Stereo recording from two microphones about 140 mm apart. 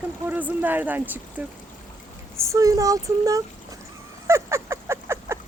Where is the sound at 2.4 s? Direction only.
20° right (ahead or behind).